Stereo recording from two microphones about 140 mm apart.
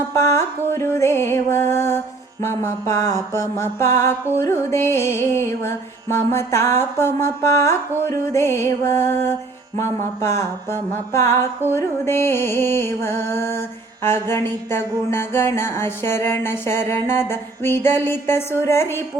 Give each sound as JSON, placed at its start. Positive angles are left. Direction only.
{"t": 0.1, "sound": "mantra", "side_deg": 20}
{"t": 11.7, "sound": "music", "side_deg": 20}